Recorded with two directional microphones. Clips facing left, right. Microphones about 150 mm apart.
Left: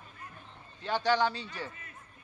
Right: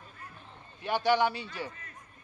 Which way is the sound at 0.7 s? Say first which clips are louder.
Right 2 dB; 10° right (ahead or behind).